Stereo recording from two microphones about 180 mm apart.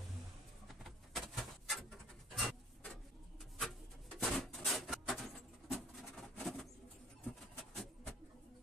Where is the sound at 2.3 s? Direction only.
5° left (ahead or behind).